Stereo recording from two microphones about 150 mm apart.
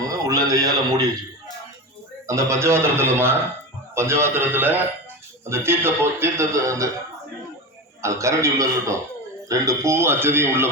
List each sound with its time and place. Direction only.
0.1 s a man's voice: 25° right (ahead or behind)
2.2 s speech: 20° right (ahead or behind)
8.0 s a man's voice: 20° right (ahead or behind)